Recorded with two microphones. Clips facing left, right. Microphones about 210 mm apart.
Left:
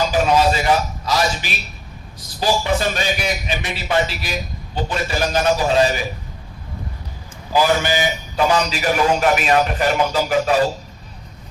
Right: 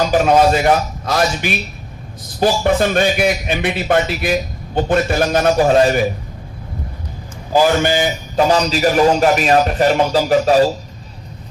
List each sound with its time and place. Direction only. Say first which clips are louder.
0.1 s a man's voice: right 4 dB; 55° right (ahead or behind)
7.5 s a man's voice: right 4 dB; 50° right (ahead or behind)
8.4 s a man's voice: right 4 dB; 35° right (ahead or behind)